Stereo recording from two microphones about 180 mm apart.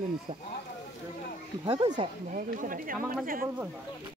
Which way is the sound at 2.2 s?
50° right (ahead or behind).